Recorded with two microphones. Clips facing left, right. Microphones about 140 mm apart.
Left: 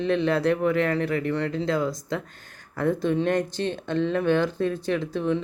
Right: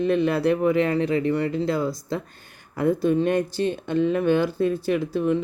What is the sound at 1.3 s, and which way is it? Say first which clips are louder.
Speech: right 2 dB; 10° right (ahead or behind).